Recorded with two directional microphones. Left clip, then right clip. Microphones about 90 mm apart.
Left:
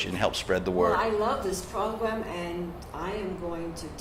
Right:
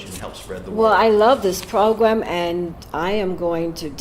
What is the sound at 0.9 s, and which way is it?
Speech, 45° right (ahead or behind).